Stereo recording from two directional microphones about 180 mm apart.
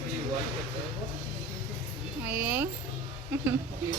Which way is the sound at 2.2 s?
10° right (ahead or behind).